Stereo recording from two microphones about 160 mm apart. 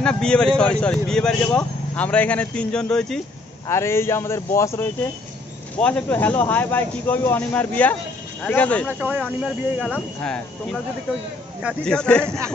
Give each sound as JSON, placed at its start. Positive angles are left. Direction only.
{"t": 0.0, "sound": "speech", "side_deg": 5}
{"t": 3.6, "sound": "speech", "side_deg": 15}
{"t": 11.8, "sound": "speech", "side_deg": 5}